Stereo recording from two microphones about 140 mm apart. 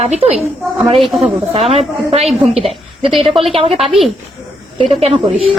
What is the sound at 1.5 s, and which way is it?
A woman's voice, 45° right (ahead or behind).